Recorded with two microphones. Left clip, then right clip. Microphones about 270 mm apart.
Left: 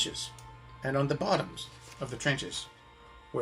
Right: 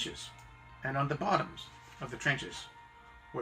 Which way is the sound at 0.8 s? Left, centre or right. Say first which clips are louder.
Left 3 dB; left.